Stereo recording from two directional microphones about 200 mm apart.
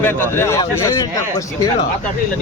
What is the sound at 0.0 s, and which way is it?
A man's voice, 10° left (ahead or behind).